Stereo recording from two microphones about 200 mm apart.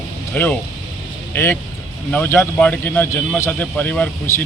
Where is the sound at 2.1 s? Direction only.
10° left (ahead or behind).